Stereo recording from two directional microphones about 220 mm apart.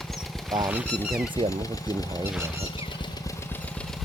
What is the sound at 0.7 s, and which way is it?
Speech, 5° right (ahead or behind).